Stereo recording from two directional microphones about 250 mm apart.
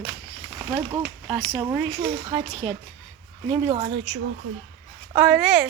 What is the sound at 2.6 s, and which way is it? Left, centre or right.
Speech, right.